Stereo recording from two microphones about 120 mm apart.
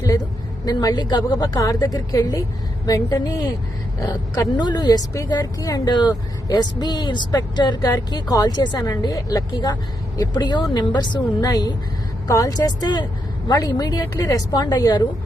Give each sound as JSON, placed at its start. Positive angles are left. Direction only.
{"t": 0.6, "sound": "a woman's voice", "side_deg": 30}